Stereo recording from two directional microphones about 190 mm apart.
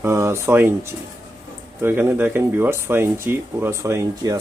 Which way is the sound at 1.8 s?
10° right (ahead or behind).